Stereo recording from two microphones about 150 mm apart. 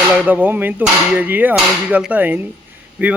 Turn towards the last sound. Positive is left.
turn(degrees=-10)  # may be behind; listen again after turning